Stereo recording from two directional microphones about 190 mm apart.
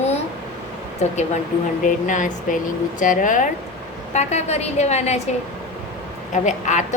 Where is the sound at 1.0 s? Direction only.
35° left (ahead or behind).